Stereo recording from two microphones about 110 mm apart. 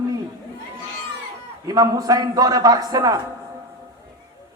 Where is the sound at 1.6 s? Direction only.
35° right (ahead or behind).